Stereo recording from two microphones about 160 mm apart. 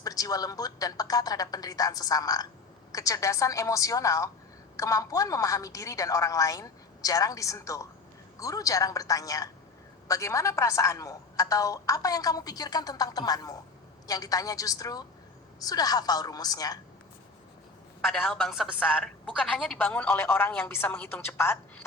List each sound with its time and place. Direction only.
0.0 s a woman's voice: 20° left (ahead or behind)
18.1 s a woman's voice: 5° left (ahead or behind)